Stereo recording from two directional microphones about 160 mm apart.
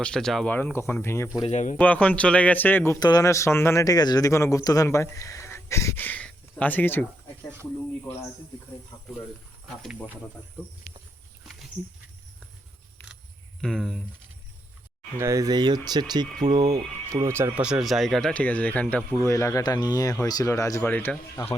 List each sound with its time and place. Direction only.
0.0 s speech: 5° left (ahead or behind)
1.5 s speech: 45° left (ahead or behind)
1.8 s speech: 10° left (ahead or behind)
3.0 s speech: 25° left (ahead or behind)
8.9 s speech: 25° left (ahead or behind)
13.0 s a sound: 15° left (ahead or behind)
13.6 s speech: 5° left (ahead or behind)
15.2 s speech: 20° right (ahead or behind)
17.6 s speech: 5° right (ahead or behind); by 20.8 s 20° left (ahead or behind)
20.8 s speech: 10° left (ahead or behind)